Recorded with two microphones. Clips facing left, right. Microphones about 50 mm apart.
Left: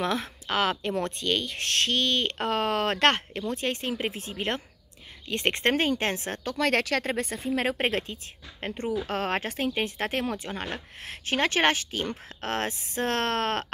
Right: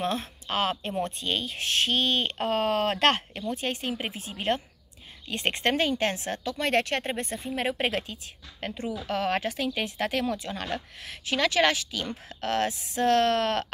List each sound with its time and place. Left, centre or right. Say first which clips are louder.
0.0 s speech: left 1 dB; left
2.3 s a woman's voice: right 1 dB; left
6.4 s speech: left 1 dB; left
7.7 s a woman's voice: left 1 dB; left
11.0 s a woman's voice: left 1 dB; left